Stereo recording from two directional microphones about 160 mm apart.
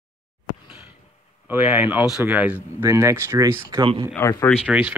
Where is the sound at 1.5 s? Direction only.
10° right (ahead or behind).